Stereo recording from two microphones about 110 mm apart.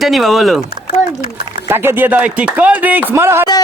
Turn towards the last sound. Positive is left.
turn(degrees=-25)  # may be behind; listen again after turning